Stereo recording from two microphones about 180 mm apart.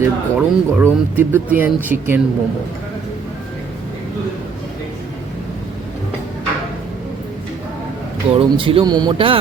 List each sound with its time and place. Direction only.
0.0 s speech: 10° right (ahead or behind)
8.3 s speech: 30° right (ahead or behind)